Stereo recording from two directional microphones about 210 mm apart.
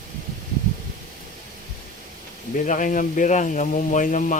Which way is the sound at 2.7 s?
40° left (ahead or behind).